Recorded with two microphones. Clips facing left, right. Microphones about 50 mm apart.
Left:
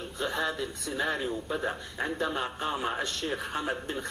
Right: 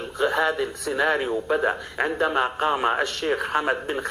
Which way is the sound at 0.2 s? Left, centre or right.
Right.